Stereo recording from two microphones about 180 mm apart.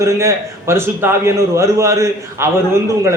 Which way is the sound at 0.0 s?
15° right (ahead or behind).